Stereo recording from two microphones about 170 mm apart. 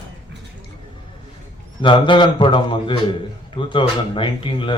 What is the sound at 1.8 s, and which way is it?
Speech, 30° left (ahead or behind).